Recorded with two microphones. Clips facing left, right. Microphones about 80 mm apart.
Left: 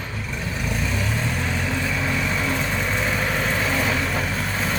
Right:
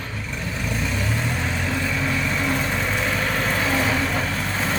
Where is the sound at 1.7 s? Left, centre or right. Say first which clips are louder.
Right 2 dB; centre.